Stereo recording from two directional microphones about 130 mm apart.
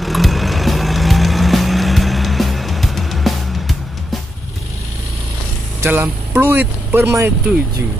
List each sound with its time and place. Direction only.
0.0 s music: centre (ahead or behind)
5.8 s speech: 15° right (ahead or behind)